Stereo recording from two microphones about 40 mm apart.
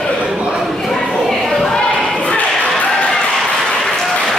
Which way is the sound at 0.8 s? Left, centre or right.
Centre.